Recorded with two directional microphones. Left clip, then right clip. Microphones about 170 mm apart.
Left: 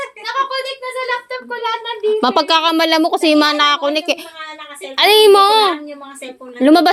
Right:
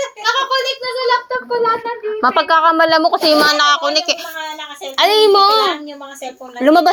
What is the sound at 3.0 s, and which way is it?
A woman's voice, 90° left.